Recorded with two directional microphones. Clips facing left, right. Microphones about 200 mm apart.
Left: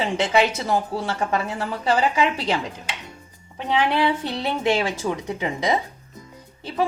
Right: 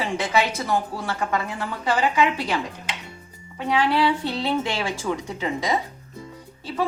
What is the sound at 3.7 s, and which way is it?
A woman's voice, 20° left (ahead or behind).